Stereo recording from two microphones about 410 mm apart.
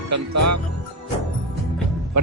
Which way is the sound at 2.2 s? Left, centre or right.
Right.